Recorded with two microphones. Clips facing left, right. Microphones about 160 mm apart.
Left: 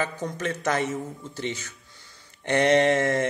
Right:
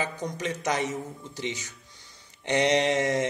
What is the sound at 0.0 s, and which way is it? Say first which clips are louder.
A man's voice: left 2 dB; 15° right (ahead or behind).